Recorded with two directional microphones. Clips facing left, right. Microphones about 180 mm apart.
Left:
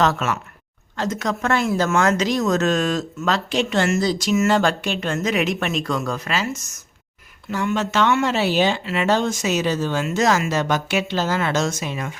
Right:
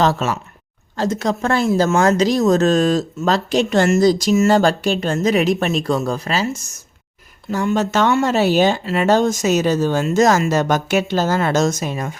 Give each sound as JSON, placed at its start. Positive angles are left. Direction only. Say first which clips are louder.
{"t": 0.0, "sound": "speech", "louder": "right 3 dB", "side_deg": -30}